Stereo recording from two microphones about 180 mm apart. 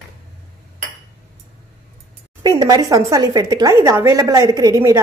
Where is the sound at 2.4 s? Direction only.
25° right (ahead or behind).